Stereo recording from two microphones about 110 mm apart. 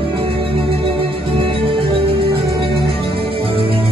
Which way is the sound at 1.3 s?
55° right (ahead or behind).